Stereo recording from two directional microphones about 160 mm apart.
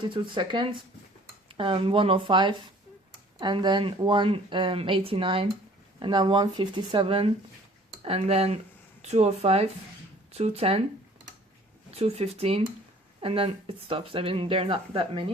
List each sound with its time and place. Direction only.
0.0 s speech: 30° right (ahead or behind)
11.9 s speech: 40° right (ahead or behind)